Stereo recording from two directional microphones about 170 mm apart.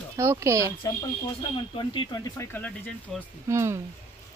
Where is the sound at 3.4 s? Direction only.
15° right (ahead or behind).